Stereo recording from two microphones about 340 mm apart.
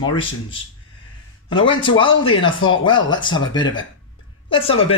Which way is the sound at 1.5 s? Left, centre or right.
Centre.